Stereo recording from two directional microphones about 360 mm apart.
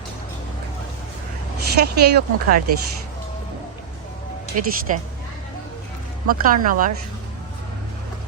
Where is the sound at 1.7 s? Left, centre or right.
Right.